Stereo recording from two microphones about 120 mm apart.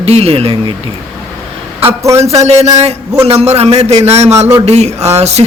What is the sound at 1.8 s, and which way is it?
Speech, 25° right (ahead or behind).